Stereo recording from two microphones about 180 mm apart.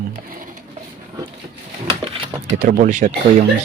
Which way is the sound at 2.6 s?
45° right (ahead or behind).